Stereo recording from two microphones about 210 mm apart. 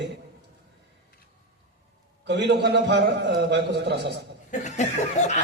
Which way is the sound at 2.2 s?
55° right (ahead or behind).